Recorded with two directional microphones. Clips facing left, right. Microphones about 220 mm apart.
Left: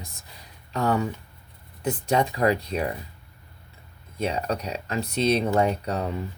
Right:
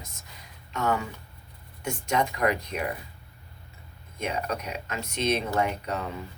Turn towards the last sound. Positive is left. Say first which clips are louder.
# left 4 dB
turn(degrees=35)  # may be behind; listen again after turning